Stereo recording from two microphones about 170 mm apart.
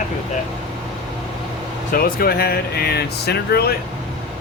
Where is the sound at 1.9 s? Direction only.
60° left (ahead or behind).